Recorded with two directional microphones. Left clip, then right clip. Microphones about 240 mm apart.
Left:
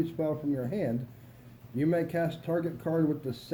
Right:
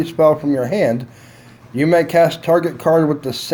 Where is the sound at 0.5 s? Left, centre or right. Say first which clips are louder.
Right 16 dB; right.